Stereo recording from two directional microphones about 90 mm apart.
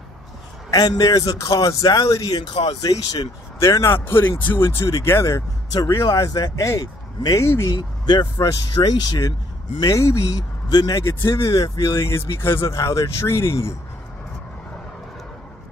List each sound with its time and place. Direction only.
0.7 s a man's voice: 45° left (ahead or behind)
3.6 s speech: 30° left (ahead or behind)
5.7 s speech: 40° left (ahead or behind)
7.7 s a man's voice: 50° left (ahead or behind)
9.8 s a man's voice: 40° left (ahead or behind)